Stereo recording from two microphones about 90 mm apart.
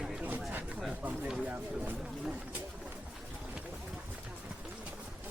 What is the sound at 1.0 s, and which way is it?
Speech, 20° right (ahead or behind).